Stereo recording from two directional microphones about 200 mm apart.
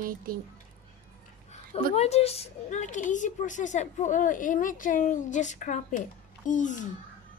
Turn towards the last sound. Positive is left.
turn(degrees=40)  # may be behind; listen again after turning